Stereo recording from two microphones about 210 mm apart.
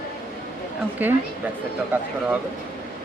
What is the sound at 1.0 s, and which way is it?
Speech, 10° right (ahead or behind).